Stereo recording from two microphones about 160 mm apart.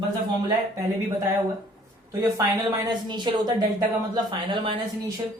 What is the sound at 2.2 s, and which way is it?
A woman's voice, 25° right (ahead or behind).